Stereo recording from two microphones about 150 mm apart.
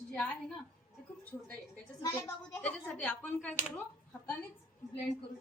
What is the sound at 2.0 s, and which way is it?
Speech, 20° left (ahead or behind).